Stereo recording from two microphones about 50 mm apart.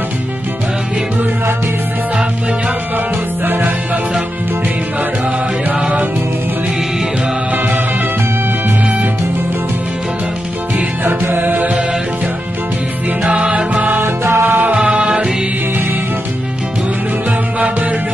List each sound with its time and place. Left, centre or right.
3.4 s music: right
11.1 s music: right
13.2 s music: right
14.0 s music: right
14.7 s music: right